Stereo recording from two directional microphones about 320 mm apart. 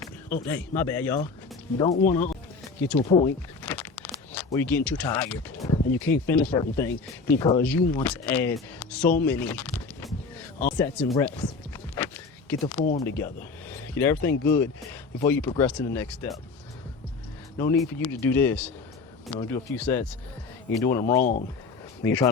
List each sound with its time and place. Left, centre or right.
0.4 s speech: centre
9.1 s a sound: centre
10.8 s speech: centre
11.2 s a sound: centre
13.0 s speech: centre
17.6 s speech: centre
21.2 s speech: left
22.0 s speech: centre